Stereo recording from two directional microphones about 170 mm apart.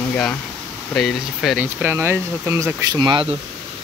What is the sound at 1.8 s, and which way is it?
Speech, 15° right (ahead or behind).